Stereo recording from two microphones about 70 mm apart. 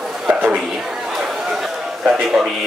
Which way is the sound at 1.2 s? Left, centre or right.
Centre.